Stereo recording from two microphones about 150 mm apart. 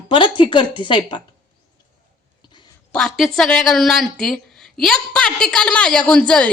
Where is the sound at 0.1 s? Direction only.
35° left (ahead or behind).